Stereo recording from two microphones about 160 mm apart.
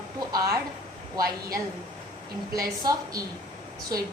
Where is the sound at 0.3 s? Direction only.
20° right (ahead or behind).